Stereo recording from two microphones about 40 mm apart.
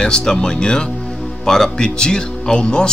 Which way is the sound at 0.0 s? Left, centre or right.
Centre.